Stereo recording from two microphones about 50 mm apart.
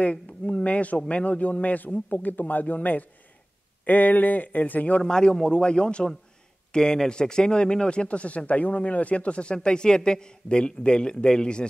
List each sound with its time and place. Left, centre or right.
0.0 s speech: left
5.0 s speech: centre